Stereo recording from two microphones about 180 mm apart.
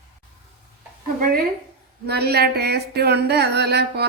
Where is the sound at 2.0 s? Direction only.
65° right (ahead or behind).